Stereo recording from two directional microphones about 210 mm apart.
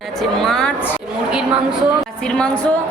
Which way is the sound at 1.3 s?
5° right (ahead or behind).